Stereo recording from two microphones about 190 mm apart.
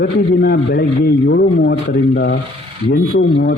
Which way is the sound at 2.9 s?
80° left.